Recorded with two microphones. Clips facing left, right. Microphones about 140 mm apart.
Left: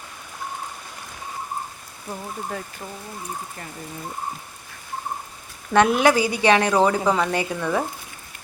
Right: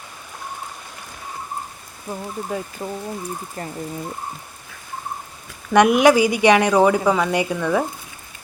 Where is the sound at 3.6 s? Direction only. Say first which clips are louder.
Right 7 dB; 40° right (ahead or behind).